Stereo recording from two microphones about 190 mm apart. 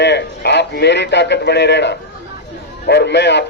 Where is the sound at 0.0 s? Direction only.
65° left (ahead or behind).